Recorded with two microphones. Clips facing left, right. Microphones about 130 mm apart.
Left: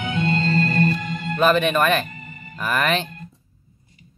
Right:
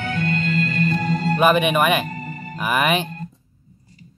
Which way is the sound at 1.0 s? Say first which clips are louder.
Right 7 dB; 40° right (ahead or behind).